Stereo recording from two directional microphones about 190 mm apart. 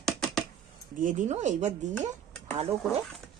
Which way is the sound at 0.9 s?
40° right (ahead or behind).